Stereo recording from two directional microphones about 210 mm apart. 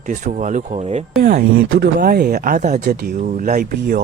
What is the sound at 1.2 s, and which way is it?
Speech, 45° right (ahead or behind).